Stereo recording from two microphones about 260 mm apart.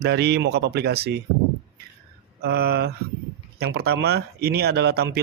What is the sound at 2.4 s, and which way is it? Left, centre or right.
Speech, right.